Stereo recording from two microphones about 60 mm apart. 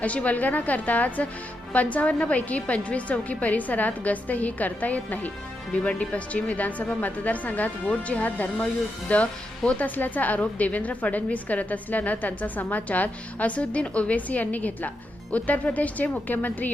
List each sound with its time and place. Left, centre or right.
0.0 s speech: left